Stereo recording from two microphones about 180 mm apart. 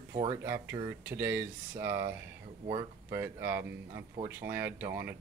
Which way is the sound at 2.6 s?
15° right (ahead or behind).